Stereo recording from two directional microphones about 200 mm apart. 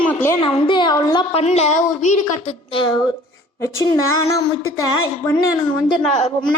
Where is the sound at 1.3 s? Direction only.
30° left (ahead or behind).